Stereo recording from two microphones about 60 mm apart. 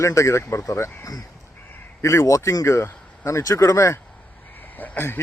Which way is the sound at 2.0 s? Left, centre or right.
Left.